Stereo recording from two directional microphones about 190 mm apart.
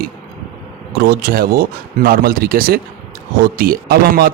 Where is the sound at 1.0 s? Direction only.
55° right (ahead or behind).